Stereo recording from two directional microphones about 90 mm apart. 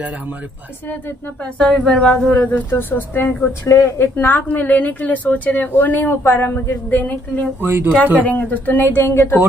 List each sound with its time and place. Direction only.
1.4 s a woman's voice: 10° left (ahead or behind)
7.6 s speech: 25° right (ahead or behind)
8.2 s a woman's voice: 20° left (ahead or behind)